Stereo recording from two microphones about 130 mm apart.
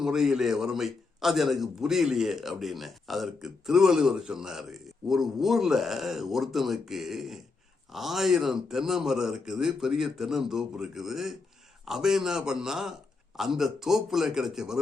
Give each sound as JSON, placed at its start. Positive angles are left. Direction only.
{"t": 0.0, "sound": "a man's voice", "side_deg": -5}